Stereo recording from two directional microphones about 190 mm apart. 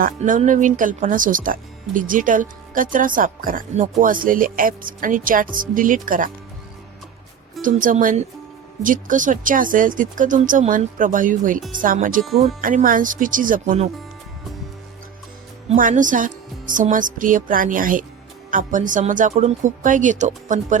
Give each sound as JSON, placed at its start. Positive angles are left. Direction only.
{"t": 0.0, "sound": "speech", "side_deg": -45}
{"t": 7.6, "sound": "speech", "side_deg": -45}
{"t": 12.6, "sound": "speech", "side_deg": -45}
{"t": 15.7, "sound": "speech", "side_deg": -45}